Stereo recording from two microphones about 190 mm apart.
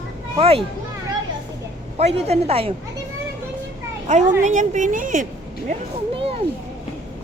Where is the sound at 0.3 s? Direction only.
30° right (ahead or behind).